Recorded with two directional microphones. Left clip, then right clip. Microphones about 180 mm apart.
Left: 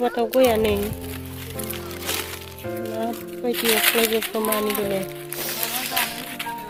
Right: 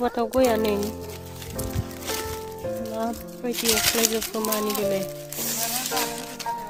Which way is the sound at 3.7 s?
20° right (ahead or behind).